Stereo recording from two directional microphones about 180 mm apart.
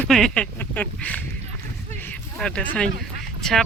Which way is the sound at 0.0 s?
5° left (ahead or behind).